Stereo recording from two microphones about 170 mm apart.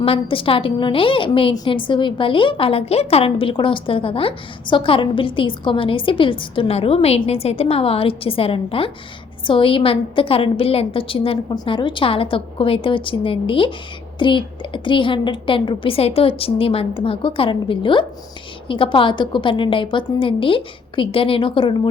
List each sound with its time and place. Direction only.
0.0 s a woman's voice: 30° left (ahead or behind)